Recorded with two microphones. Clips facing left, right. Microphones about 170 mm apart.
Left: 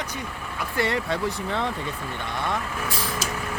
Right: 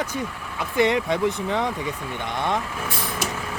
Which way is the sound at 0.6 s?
20° right (ahead or behind).